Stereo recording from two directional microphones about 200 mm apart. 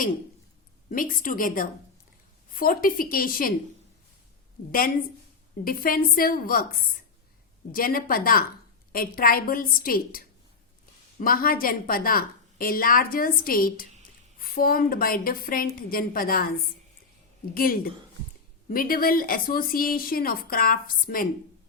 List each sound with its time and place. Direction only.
0.9 s a woman's voice: 45° left (ahead or behind)
4.7 s a woman's voice: 45° left (ahead or behind)
17.5 s a woman's voice: 45° left (ahead or behind)